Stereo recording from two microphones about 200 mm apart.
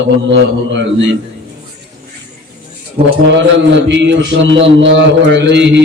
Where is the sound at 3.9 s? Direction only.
65° right (ahead or behind).